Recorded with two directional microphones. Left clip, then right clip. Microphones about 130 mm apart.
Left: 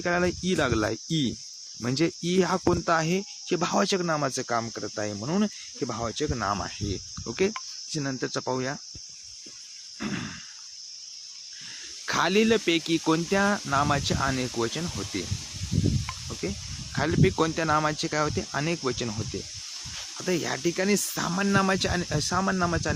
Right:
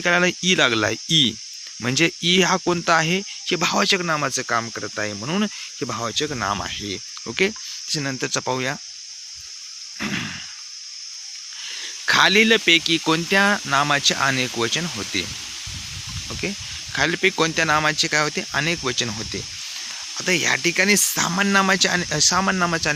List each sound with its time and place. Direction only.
0.0 s speech: 20° right (ahead or behind)
10.0 s a sound: 20° right (ahead or behind)
12.0 s speech: 10° right (ahead or behind)
14.2 s speech: 20° right (ahead or behind)
16.9 s speech: 15° right (ahead or behind)
20.2 s speech: 10° right (ahead or behind)